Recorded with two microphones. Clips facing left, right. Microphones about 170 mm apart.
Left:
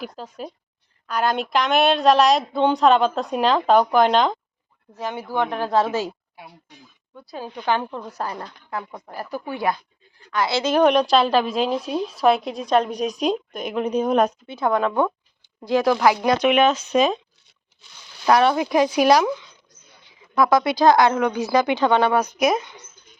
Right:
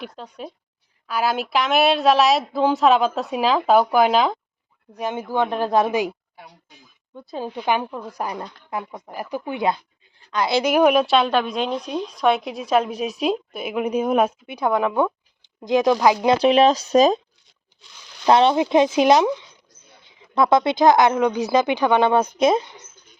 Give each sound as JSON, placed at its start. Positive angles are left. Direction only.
{"t": 0.0, "sound": "a woman's voice", "side_deg": 0}
{"t": 4.9, "sound": "a woman's voice", "side_deg": -15}
{"t": 18.3, "sound": "speech", "side_deg": -25}